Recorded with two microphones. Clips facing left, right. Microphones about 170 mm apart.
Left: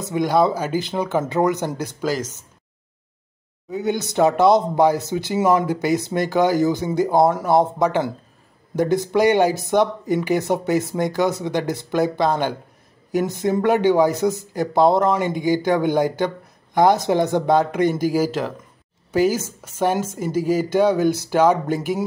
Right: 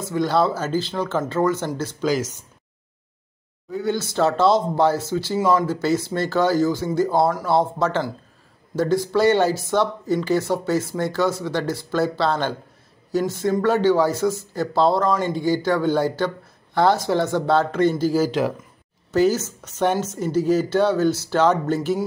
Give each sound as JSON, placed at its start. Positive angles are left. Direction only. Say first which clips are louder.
{"t": 0.0, "sound": "speech", "louder": "left 2 dB", "side_deg": 15}
{"t": 2.0, "sound": "speech", "louder": "right 2 dB", "side_deg": -5}
{"t": 3.7, "sound": "speech", "louder": "left 2 dB", "side_deg": 20}